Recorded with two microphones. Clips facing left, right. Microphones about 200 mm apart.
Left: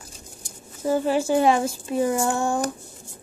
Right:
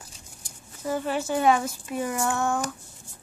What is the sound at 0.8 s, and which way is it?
A woman's voice, 30° left (ahead or behind).